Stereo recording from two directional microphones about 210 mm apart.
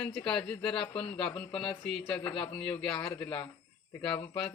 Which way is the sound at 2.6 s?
5° left (ahead or behind).